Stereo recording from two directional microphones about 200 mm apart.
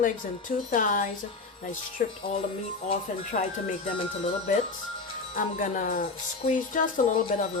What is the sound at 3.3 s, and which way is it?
Music, 45° left (ahead or behind).